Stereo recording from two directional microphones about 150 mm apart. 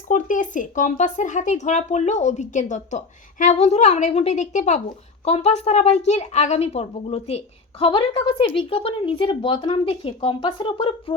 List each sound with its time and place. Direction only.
0.1 s a woman's voice: 60° left (ahead or behind); by 11.1 s 35° left (ahead or behind)